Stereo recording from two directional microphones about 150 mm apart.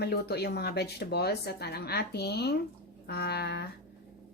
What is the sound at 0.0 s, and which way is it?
Speech, 90° left.